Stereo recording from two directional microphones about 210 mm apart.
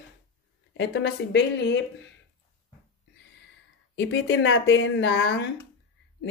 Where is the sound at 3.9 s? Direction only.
60° left (ahead or behind).